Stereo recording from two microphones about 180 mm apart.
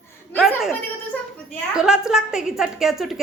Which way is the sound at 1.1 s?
10° left (ahead or behind).